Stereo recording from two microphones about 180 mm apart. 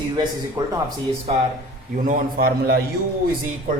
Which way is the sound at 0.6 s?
20° right (ahead or behind).